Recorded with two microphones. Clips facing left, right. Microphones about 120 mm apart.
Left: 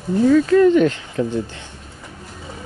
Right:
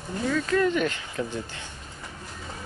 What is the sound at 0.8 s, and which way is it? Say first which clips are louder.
Speech: left 10 dB; 25° left (ahead or behind).